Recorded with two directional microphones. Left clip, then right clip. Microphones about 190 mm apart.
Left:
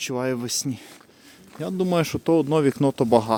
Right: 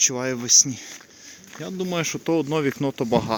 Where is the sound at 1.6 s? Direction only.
30° left (ahead or behind).